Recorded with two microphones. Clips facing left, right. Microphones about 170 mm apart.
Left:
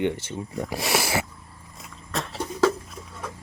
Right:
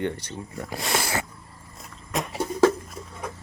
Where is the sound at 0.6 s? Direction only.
10° left (ahead or behind).